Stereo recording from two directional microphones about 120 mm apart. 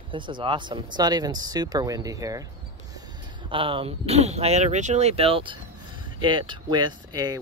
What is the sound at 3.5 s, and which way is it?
Speech, 45° right (ahead or behind).